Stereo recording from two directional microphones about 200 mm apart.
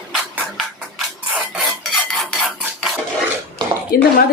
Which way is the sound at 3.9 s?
50° left (ahead or behind).